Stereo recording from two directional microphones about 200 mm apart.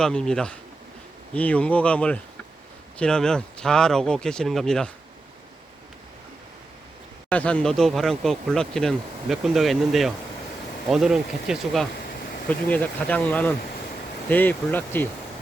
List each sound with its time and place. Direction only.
0.0 s speech: 5° left (ahead or behind)
7.3 s speech: 5° left (ahead or behind)